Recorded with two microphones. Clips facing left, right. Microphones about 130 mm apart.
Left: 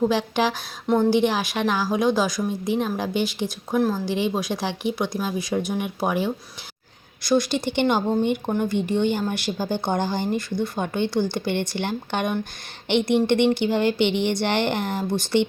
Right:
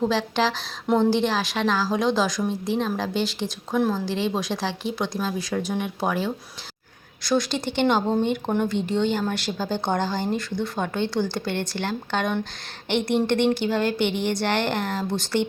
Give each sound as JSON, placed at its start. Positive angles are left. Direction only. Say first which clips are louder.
{"t": 0.1, "sound": "a woman's voice", "louder": "left 1 dB", "side_deg": 15}
{"t": 14.0, "sound": "speech", "louder": "left 3 dB", "side_deg": 65}
{"t": 14.4, "sound": "a woman's voice", "louder": "left 1 dB", "side_deg": 15}